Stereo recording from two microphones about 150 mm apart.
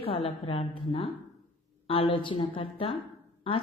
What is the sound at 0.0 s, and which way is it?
A woman's voice, 40° left (ahead or behind).